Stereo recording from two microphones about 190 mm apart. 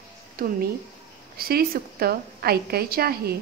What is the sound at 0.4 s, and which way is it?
A woman's voice, 50° right (ahead or behind).